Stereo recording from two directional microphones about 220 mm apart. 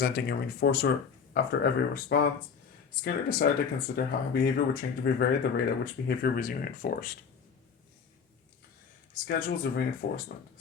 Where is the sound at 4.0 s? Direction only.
50° left (ahead or behind).